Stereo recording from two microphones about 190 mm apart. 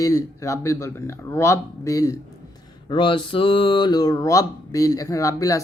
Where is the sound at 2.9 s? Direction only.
25° left (ahead or behind).